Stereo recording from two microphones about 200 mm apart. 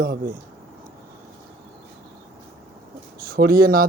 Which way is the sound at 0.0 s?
45° right (ahead or behind).